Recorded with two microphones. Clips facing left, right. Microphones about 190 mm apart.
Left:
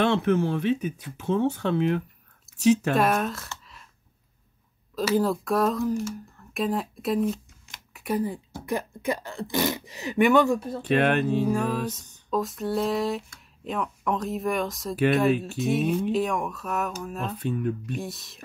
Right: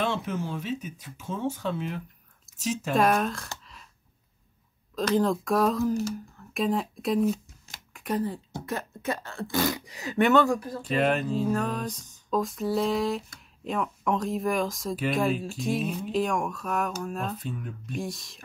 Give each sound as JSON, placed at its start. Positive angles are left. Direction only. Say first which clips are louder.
{"t": 0.0, "sound": "speech", "louder": "left 7 dB", "side_deg": 65}
{"t": 2.9, "sound": "speech", "louder": "even", "side_deg": 0}
{"t": 4.9, "sound": "speech", "louder": "left 1 dB", "side_deg": 5}
{"t": 10.1, "sound": "speech", "louder": "left 2 dB", "side_deg": 10}
{"t": 10.5, "sound": "speech", "louder": "left 2 dB", "side_deg": 25}
{"t": 10.8, "sound": "speech", "louder": "left 4 dB", "side_deg": 65}
{"t": 11.5, "sound": "speech", "louder": "left 2 dB", "side_deg": 5}
{"t": 17.4, "sound": "speech", "louder": "left 9 dB", "side_deg": 65}
{"t": 17.9, "sound": "speech", "louder": "even", "side_deg": 0}